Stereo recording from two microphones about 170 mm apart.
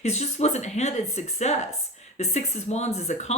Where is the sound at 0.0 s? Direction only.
40° left (ahead or behind).